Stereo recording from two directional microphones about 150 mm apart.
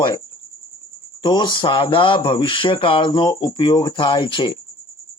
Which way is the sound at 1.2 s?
30° left (ahead or behind).